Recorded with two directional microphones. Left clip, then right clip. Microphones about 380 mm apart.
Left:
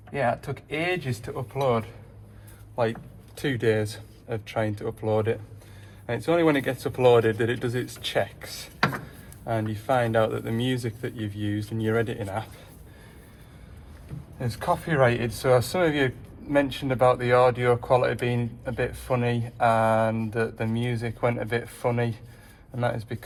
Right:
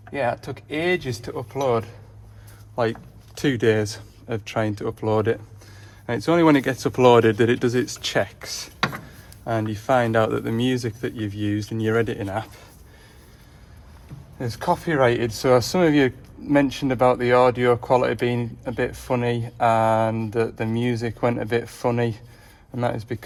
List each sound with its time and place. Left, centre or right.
0.1 s speech: right
14.3 s speech: right